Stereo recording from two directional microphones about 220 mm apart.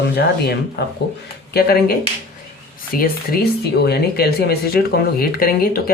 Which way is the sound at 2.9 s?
45° left (ahead or behind).